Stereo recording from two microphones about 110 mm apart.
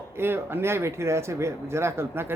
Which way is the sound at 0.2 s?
20° right (ahead or behind).